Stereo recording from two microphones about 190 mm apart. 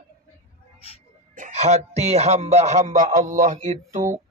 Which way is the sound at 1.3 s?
40° right (ahead or behind).